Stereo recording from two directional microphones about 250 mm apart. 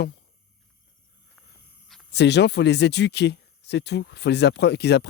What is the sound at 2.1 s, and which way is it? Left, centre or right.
Speech, left.